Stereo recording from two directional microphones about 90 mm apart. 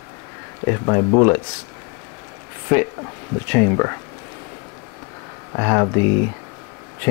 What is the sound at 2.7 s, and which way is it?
Speech, 20° left (ahead or behind).